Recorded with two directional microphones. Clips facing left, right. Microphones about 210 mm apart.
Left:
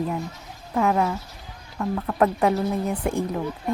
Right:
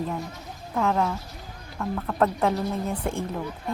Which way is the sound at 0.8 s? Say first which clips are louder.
Left 3 dB; 10° left (ahead or behind).